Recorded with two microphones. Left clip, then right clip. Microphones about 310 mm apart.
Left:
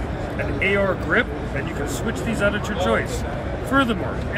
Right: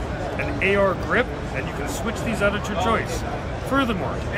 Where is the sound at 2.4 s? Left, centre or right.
Centre.